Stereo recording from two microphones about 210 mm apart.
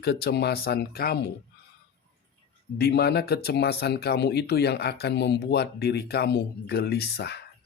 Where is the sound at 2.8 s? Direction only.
50° left (ahead or behind).